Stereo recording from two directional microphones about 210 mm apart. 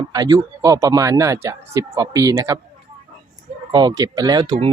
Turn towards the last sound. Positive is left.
turn(degrees=-20)  # may be behind; listen again after turning